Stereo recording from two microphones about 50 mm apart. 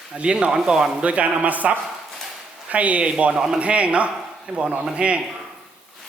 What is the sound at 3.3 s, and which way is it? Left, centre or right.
Speech, centre.